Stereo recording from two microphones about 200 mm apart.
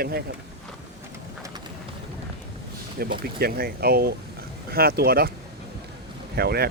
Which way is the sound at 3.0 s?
50° right (ahead or behind).